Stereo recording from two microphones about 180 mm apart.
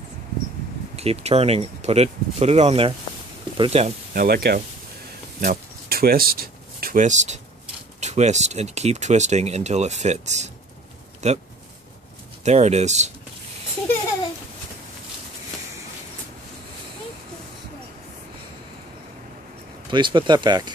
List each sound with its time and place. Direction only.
0.9 s speech: 35° right (ahead or behind)
4.1 s speech: 55° right (ahead or behind)
5.4 s a sound: 55° right (ahead or behind)
8.0 s speech: 40° right (ahead or behind)
12.4 s speech: 35° right (ahead or behind)
19.9 s speech: 25° right (ahead or behind)